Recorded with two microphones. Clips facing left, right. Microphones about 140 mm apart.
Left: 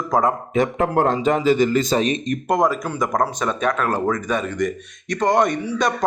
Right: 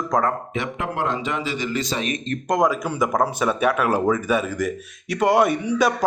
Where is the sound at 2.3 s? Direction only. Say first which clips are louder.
Right 2 dB; 5° left (ahead or behind).